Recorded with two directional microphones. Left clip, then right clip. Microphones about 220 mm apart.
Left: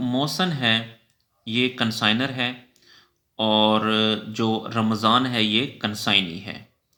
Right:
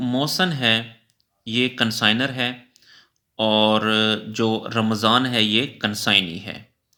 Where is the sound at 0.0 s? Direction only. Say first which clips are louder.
Right 2 dB; 25° right (ahead or behind).